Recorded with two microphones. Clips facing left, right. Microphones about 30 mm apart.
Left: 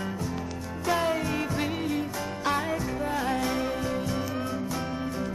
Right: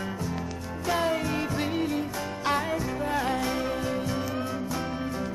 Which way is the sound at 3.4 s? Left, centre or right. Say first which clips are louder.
Even; centre.